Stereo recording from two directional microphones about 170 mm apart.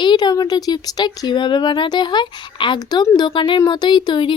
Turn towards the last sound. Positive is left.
turn(degrees=25)  # may be behind; listen again after turning